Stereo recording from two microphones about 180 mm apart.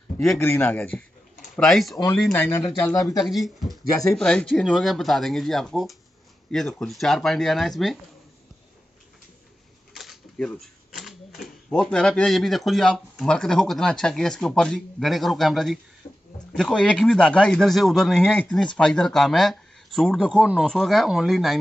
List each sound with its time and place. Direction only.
0.4 s speech: 10° left (ahead or behind)
2.4 s speech: 15° left (ahead or behind)
3.3 s speech: centre (ahead or behind)
9.9 s speech: centre (ahead or behind)
16.0 s a sound: 30° left (ahead or behind)
16.5 s speech: 5° left (ahead or behind)